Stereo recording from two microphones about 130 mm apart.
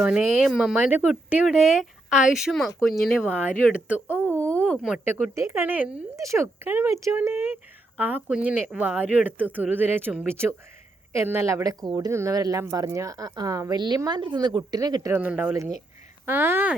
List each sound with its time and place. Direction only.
0.0 s speech: 10° right (ahead or behind)
3.8 s speech: 10° right (ahead or behind)
4.4 s a sound: 10° left (ahead or behind)
5.0 s speech: 15° right (ahead or behind)
15.1 s speech: 15° right (ahead or behind)